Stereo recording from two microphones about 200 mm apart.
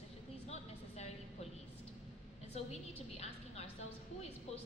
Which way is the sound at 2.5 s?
30° left (ahead or behind).